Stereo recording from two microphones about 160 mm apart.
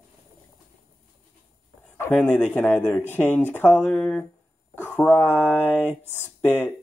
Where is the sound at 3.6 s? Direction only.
5° right (ahead or behind).